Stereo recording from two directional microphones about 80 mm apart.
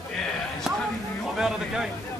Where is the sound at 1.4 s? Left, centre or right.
Centre.